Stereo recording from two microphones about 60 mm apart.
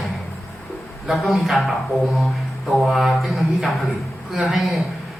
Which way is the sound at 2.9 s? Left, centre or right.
Centre.